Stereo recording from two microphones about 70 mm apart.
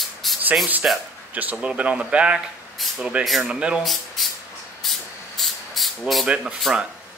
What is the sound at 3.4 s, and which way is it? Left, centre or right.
Speech, centre.